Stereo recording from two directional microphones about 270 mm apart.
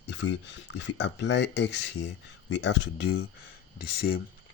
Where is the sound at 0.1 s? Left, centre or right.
Left.